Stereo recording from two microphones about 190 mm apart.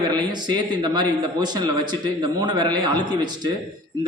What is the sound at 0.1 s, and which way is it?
A man's voice, 20° right (ahead or behind).